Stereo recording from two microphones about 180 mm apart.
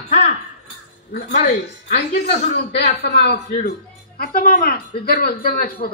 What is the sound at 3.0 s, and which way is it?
A woman's voice, 65° left (ahead or behind).